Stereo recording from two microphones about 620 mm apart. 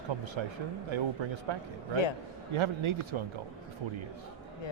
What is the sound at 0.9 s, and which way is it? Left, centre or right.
Speech, right.